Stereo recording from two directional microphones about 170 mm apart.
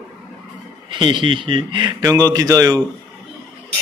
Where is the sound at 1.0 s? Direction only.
30° right (ahead or behind).